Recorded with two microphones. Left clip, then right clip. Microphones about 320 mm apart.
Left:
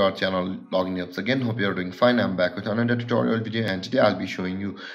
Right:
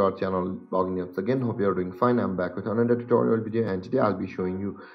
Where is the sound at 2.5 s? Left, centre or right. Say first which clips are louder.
Even; centre.